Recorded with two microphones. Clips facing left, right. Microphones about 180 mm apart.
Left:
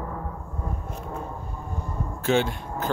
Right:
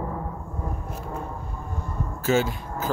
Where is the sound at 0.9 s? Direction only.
Centre (ahead or behind).